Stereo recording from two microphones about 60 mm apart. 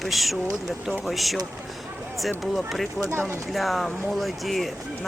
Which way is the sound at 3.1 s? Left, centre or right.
Right.